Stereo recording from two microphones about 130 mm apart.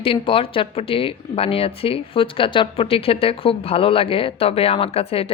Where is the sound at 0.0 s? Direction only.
45° left (ahead or behind).